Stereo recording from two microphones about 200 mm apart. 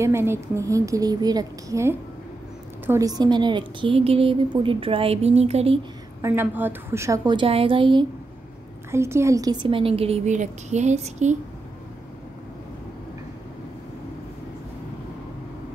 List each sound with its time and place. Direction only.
0.0 s a woman's voice: 10° right (ahead or behind); by 5.8 s 30° right (ahead or behind)
6.2 s a woman's voice: 10° right (ahead or behind)
8.9 s a woman's voice: 15° right (ahead or behind); by 11.3 s 35° right (ahead or behind)